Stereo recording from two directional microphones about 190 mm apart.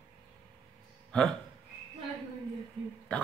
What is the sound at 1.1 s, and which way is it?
Speech, 5° left (ahead or behind).